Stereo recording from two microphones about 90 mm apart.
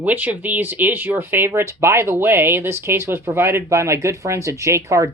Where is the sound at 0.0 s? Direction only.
20° right (ahead or behind).